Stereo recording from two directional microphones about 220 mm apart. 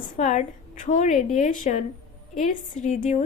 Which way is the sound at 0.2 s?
30° left (ahead or behind).